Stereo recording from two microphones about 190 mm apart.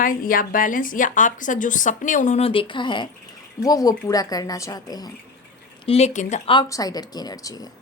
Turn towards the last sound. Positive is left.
turn(degrees=20)  # may be behind; listen again after turning